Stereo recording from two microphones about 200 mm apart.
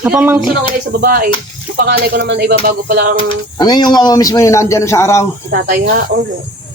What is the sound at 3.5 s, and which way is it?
A man's voice, 20° left (ahead or behind).